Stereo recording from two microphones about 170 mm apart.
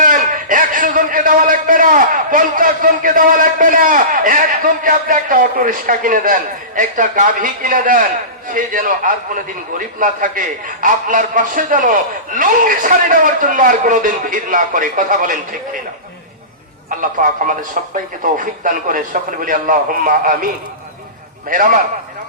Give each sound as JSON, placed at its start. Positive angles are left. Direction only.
{"t": 0.0, "sound": "a man's voice", "side_deg": -50}
{"t": 17.0, "sound": "a man's voice", "side_deg": -50}
{"t": 21.5, "sound": "a man's voice", "side_deg": -50}